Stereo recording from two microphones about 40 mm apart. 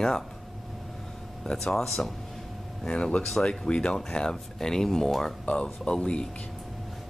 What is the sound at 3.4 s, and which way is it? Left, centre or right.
Speech, centre.